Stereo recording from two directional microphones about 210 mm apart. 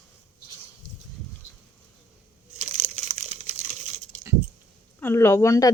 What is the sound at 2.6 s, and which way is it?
Crumpling, 30° right (ahead or behind).